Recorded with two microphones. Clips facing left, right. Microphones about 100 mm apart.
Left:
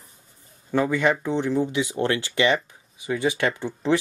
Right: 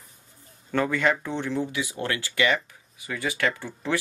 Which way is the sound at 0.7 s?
15° left (ahead or behind).